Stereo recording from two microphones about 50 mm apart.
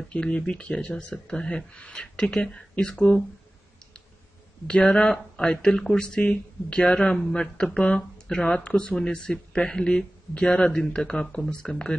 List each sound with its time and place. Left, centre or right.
0.1 s speech: left
4.7 s speech: left
6.2 s speech: left